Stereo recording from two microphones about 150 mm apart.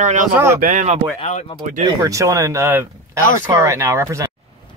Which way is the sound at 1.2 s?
50° left (ahead or behind).